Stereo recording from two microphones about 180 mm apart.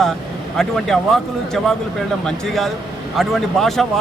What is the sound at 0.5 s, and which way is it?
Speech, centre (ahead or behind).